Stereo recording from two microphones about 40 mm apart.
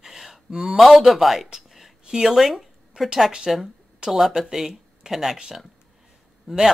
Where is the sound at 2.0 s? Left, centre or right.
Centre.